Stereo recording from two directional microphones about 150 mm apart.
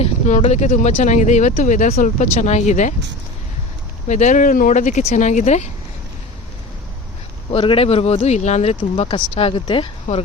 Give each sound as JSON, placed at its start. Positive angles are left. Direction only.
{"t": 0.0, "sound": "speech", "side_deg": 50}
{"t": 4.1, "sound": "speech", "side_deg": 50}
{"t": 7.5, "sound": "speech", "side_deg": 35}
{"t": 8.7, "sound": "speech", "side_deg": 30}